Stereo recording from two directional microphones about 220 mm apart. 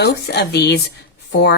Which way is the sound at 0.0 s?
50° left (ahead or behind).